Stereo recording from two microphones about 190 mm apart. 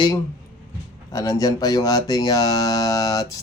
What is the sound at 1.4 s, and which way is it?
Speech, 20° left (ahead or behind).